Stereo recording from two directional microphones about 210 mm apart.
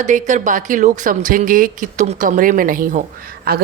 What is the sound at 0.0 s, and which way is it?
Speech, 35° right (ahead or behind).